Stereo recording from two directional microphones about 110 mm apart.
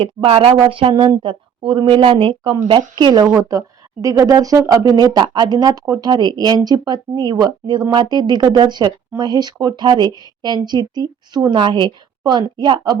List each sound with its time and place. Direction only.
0.3 s speech: 70° right (ahead or behind)
0.6 s speech: 50° right (ahead or behind)